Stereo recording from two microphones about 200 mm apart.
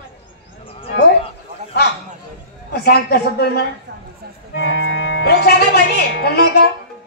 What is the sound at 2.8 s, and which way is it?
Speech, 50° left (ahead or behind).